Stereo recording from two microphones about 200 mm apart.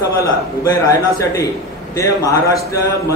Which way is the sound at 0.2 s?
15° left (ahead or behind).